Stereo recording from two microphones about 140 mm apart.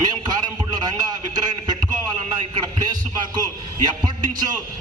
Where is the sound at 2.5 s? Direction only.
30° right (ahead or behind).